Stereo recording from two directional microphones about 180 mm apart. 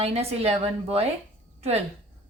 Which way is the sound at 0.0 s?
35° right (ahead or behind).